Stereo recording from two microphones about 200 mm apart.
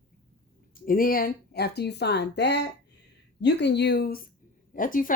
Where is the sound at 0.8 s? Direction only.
45° left (ahead or behind).